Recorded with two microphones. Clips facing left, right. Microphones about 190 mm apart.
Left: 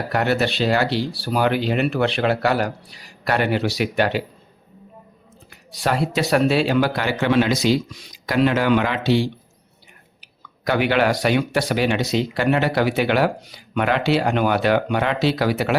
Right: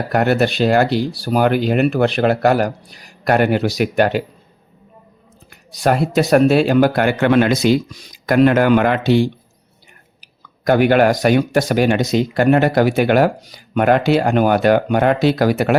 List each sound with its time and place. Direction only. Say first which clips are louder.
0.1 s speech: right 5 dB; 50° right (ahead or behind)
5.5 s speech: right 6 dB; 45° right (ahead or behind)
10.6 s speech: right 6 dB; 45° right (ahead or behind)